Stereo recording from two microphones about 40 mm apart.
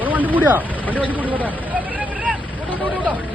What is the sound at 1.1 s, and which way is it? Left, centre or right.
Speech, right.